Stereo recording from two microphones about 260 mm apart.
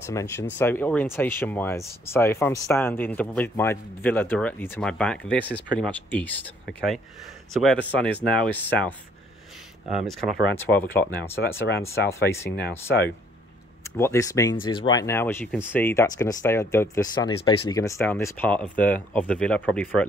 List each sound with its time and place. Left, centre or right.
0.0 s speech: centre
7.6 s speech: centre
12.4 s speech: left
13.8 s speech: centre